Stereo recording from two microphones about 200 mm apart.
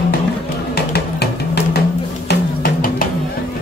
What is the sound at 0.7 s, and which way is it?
Music, 50° left (ahead or behind).